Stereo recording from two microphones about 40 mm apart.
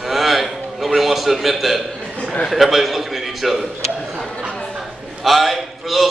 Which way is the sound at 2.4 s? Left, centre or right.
Centre.